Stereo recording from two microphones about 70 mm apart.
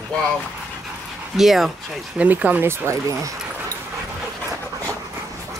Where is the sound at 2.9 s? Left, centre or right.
Right.